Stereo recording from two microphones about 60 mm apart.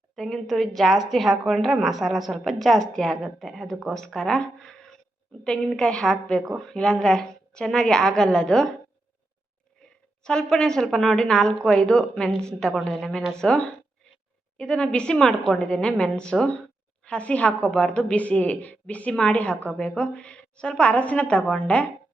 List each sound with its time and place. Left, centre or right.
0.2 s a woman's voice: centre
9.8 s a sound: centre
10.2 s a woman's voice: centre
13.4 s a woman's voice: centre